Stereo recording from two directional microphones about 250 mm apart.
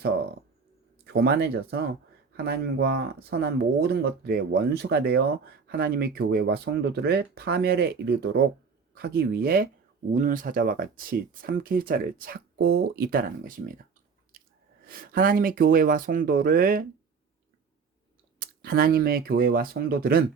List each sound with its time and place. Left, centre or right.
1.0 s speech: right
14.3 s chewing: right
14.8 s speech: right
18.3 s speech: right